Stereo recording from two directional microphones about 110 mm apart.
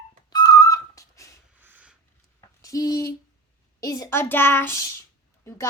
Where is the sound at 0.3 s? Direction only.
35° left (ahead or behind).